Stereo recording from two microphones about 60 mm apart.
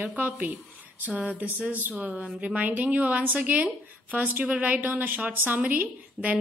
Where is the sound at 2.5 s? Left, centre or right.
Right.